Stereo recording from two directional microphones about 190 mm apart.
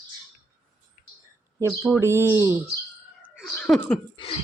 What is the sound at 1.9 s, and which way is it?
Speech, 15° right (ahead or behind).